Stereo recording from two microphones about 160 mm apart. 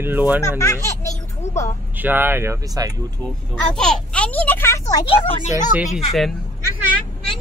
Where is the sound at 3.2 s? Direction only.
5° left (ahead or behind).